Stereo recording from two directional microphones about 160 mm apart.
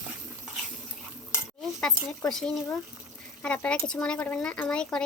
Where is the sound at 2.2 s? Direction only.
5° left (ahead or behind).